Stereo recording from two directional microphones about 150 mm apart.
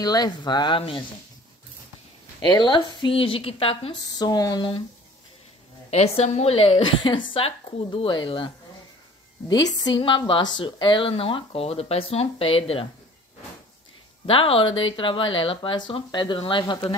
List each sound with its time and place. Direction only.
0.0 s speech: 25° left (ahead or behind)
2.4 s a woman's voice: 30° left (ahead or behind)
4.1 s speech: 25° left (ahead or behind)
5.9 s a woman's voice: 45° left (ahead or behind)
9.5 s a woman's voice: 25° left (ahead or behind)
14.2 s a woman's voice: 40° left (ahead or behind)